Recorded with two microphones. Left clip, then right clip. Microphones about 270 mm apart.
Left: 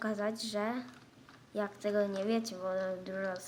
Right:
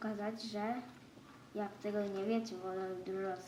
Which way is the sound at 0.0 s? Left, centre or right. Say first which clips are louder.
Left 6 dB; left.